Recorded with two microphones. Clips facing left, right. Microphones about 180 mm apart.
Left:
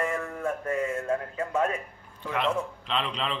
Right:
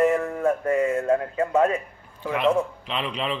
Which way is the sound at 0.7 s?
70° right (ahead or behind).